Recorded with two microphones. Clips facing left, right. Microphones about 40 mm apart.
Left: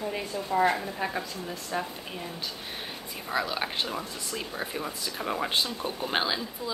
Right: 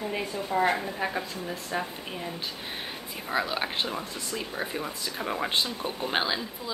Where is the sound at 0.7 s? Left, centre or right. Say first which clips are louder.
Even; centre.